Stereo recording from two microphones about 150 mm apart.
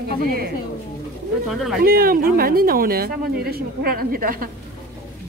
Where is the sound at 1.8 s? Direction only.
80° right.